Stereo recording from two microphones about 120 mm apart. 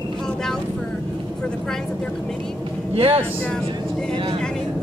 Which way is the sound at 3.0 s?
50° right (ahead or behind).